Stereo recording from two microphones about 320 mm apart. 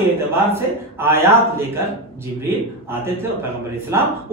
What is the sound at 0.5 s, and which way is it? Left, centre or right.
Speech, centre.